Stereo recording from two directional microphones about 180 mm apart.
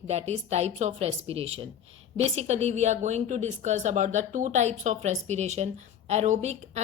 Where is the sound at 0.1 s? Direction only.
35° right (ahead or behind).